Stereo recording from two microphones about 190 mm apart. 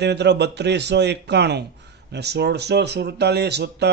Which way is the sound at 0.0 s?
65° right (ahead or behind).